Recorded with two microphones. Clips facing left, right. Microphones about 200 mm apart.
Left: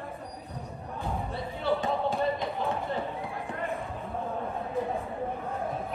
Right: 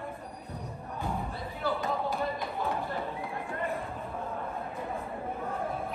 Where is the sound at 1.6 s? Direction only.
30° left (ahead or behind).